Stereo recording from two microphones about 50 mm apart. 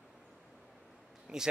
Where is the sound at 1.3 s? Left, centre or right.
Centre.